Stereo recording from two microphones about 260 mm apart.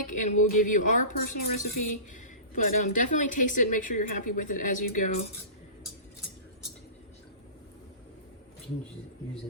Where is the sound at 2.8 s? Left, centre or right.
Left.